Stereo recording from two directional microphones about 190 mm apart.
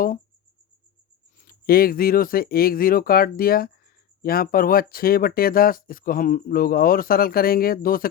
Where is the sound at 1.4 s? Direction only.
50° left (ahead or behind).